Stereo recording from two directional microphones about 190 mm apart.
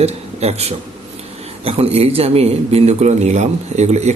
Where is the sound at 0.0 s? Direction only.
35° right (ahead or behind).